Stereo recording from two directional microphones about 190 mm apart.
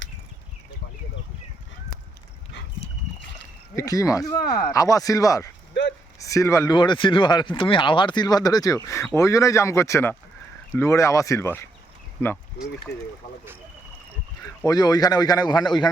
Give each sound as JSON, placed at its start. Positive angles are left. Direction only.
{"t": 3.8, "sound": "speech", "side_deg": 20}
{"t": 14.4, "sound": "speech", "side_deg": 20}